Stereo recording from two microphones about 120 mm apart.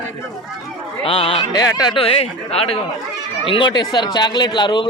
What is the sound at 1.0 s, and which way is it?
Speech, 50° left (ahead or behind).